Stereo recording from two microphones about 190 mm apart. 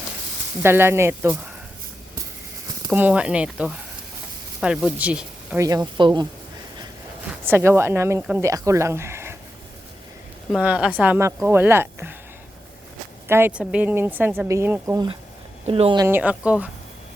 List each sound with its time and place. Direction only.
0.6 s speech: 10° right (ahead or behind)
2.9 s speech: 5° right (ahead or behind)
5.6 s speech: 20° right (ahead or behind)
7.3 s speech: 10° right (ahead or behind)
10.5 s speech: 5° right (ahead or behind)
13.2 s speech: 10° right (ahead or behind)
15.6 s speech: 30° right (ahead or behind)
16.0 s speech: 10° right (ahead or behind)